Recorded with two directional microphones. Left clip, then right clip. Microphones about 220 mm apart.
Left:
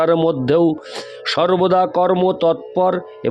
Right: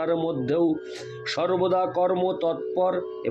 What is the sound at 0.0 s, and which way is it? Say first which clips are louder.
Speech: left 10 dB; 50° left (ahead or behind).